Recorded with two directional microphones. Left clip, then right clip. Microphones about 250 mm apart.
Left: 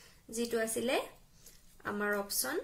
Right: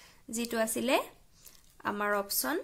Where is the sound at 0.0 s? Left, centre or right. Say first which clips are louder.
Even; right.